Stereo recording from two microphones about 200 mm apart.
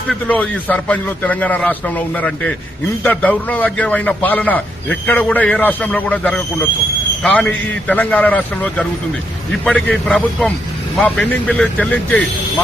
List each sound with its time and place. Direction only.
0.1 s a man's voice: 5° left (ahead or behind)